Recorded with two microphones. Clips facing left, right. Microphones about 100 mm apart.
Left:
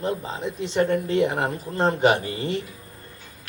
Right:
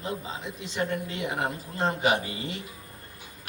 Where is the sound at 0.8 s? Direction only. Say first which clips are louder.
Left 10 dB; 55° left (ahead or behind).